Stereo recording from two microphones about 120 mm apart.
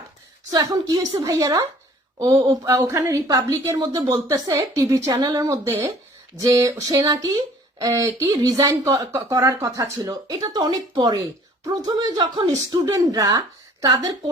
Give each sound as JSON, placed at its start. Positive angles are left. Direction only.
{"t": 0.5, "sound": "a woman's voice", "side_deg": -35}